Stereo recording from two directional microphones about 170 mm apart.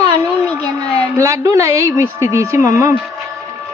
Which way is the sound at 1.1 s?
20° right (ahead or behind).